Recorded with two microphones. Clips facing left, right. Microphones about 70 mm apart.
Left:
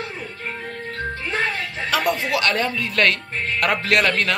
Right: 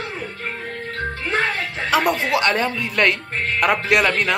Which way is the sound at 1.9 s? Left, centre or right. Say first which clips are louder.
Right 3 dB; right.